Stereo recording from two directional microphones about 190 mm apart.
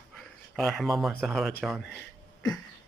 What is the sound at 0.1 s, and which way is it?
Speech, centre (ahead or behind).